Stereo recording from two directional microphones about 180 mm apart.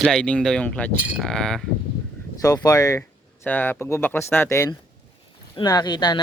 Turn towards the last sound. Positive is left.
turn(degrees=25)  # may be behind; listen again after turning